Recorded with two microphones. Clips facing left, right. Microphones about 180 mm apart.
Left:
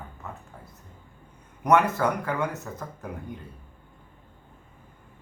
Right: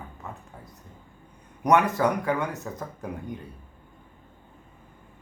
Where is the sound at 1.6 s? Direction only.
15° right (ahead or behind).